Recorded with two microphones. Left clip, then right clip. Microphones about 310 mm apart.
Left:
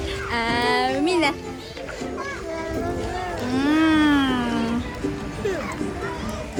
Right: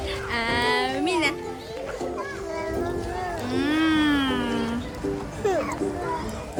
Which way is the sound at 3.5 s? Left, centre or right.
Centre.